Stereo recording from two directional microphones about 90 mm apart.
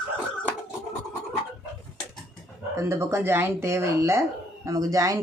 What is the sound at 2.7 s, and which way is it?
Speech, 30° right (ahead or behind).